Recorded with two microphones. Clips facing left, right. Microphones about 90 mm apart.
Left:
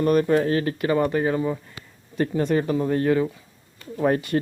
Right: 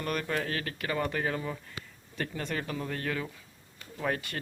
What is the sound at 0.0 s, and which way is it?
Speech, 25° left (ahead or behind).